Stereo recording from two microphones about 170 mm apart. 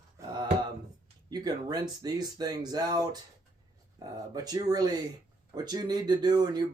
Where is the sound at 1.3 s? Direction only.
25° right (ahead or behind).